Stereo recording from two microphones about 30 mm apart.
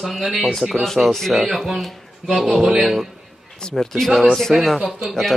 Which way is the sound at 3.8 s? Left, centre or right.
Centre.